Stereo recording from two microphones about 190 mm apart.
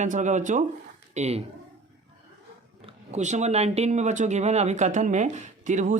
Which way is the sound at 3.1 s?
35° right (ahead or behind).